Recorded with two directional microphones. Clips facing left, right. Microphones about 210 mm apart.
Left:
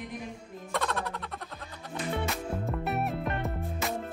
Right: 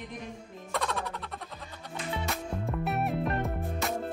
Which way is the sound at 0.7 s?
Centre (ahead or behind).